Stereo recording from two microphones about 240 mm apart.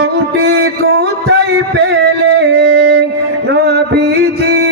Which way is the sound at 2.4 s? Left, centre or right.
Right.